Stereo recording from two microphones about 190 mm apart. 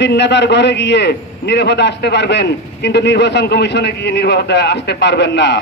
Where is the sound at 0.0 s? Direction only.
65° left (ahead or behind).